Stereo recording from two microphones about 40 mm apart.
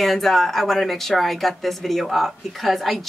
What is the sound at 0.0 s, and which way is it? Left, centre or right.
Speech, centre.